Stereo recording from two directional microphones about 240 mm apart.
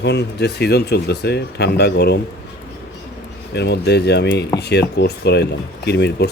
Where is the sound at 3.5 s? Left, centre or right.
Left.